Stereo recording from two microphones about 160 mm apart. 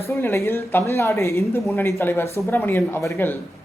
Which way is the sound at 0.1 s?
15° left (ahead or behind).